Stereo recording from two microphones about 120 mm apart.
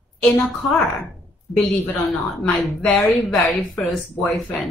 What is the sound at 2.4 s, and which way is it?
Speech, 15° left (ahead or behind).